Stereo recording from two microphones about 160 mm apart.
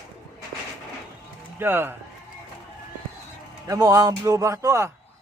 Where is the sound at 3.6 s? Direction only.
20° right (ahead or behind).